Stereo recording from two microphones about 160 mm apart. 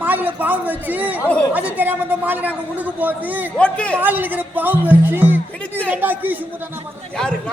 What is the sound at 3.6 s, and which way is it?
Speech, 5° left (ahead or behind).